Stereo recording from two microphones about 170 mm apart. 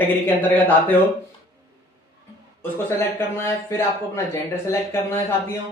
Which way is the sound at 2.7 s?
15° left (ahead or behind).